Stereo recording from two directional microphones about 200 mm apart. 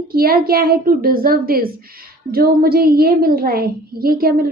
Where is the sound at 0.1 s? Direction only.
50° right (ahead or behind).